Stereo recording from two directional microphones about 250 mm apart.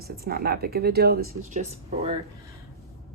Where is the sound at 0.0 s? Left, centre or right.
Right.